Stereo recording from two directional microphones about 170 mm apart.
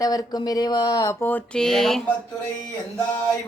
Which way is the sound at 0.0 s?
20° left (ahead or behind).